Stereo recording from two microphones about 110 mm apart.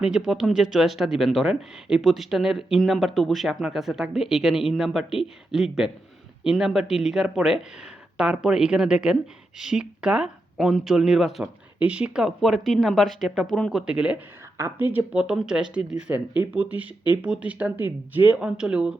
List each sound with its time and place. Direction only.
0.3 s speech: centre (ahead or behind)